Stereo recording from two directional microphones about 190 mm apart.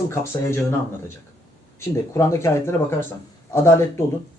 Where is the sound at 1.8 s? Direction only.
15° left (ahead or behind).